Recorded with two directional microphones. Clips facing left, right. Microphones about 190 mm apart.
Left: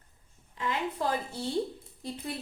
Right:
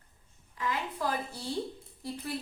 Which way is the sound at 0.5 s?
25° left (ahead or behind).